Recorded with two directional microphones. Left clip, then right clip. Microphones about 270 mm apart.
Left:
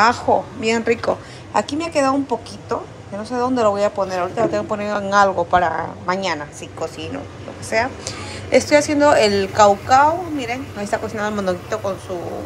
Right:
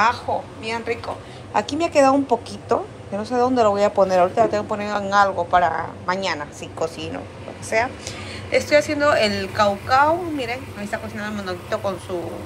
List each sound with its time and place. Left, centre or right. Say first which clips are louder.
0.6 s speech: left 7 dB; left
1.5 s a woman's voice: even; centre